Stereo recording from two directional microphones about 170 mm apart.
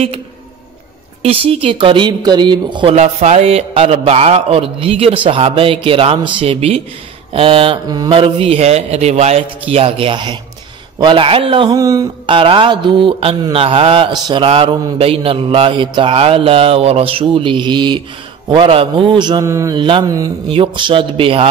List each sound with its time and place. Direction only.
1.2 s a man's voice: 35° right (ahead or behind)
11.7 s a man's voice: 20° right (ahead or behind)
12.3 s a man's voice: 30° right (ahead or behind)